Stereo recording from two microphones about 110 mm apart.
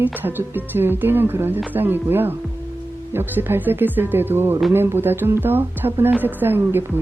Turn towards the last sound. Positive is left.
turn(degrees=-20)  # may be behind; listen again after turning